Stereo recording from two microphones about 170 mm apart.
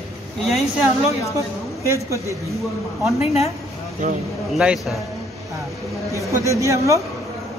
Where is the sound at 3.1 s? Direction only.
40° left (ahead or behind).